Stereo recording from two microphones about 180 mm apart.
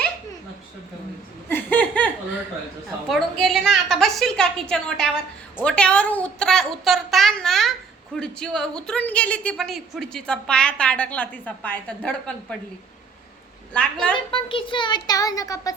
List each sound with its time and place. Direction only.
1.5 s laughter: 10° left (ahead or behind)
3.1 s a woman's voice: centre (ahead or behind)
13.7 s a woman's voice: 5° left (ahead or behind)
14.3 s a child's voice: 25° left (ahead or behind)